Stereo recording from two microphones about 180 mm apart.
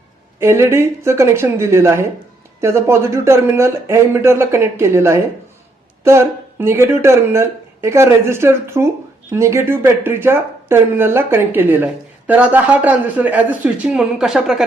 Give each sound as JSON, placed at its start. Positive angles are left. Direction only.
{"t": 0.3, "sound": "speech", "side_deg": -15}